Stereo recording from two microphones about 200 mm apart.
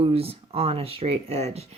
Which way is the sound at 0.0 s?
30° right (ahead or behind).